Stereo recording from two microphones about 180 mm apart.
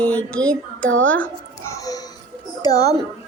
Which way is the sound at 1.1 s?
10° left (ahead or behind).